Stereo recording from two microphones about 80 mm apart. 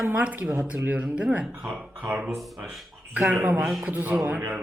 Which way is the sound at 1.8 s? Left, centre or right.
Centre.